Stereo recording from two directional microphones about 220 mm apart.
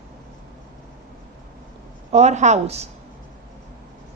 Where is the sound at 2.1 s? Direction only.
30° right (ahead or behind).